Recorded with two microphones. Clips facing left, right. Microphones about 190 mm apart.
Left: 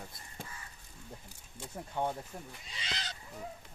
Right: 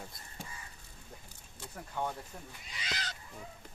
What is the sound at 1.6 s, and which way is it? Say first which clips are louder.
Speech: left 3 dB; 25° left (ahead or behind).